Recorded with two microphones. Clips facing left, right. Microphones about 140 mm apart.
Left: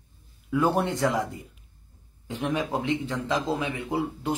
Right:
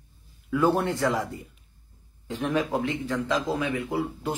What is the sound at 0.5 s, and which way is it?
Speech, 20° left (ahead or behind).